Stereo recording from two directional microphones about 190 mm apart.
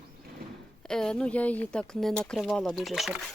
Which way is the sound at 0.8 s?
5° left (ahead or behind).